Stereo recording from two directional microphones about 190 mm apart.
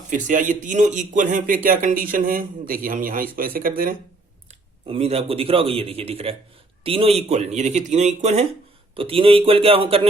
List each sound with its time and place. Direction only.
0.1 s speech: 40° right (ahead or behind)
4.9 s a man's voice: 30° right (ahead or behind)